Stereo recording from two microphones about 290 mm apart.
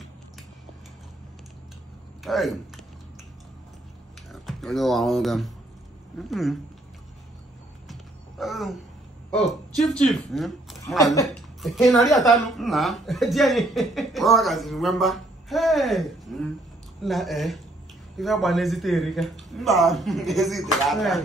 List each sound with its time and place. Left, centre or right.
2.2 s speech: centre
4.3 s speech: centre
7.9 s a sound: centre
9.3 s a woman's voice: centre